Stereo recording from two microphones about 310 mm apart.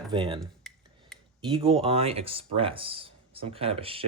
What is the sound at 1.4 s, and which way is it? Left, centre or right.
Speech, centre.